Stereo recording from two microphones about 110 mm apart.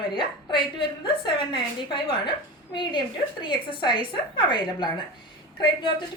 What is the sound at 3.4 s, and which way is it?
A woman's voice, 45° left (ahead or behind).